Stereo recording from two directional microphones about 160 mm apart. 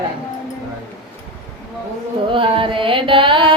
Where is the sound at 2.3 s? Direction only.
35° right (ahead or behind).